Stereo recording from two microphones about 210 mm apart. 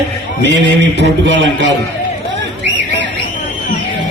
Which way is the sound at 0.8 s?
60° right (ahead or behind).